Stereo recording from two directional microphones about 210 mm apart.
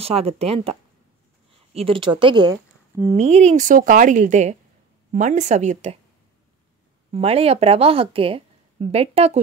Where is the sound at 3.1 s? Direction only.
30° right (ahead or behind).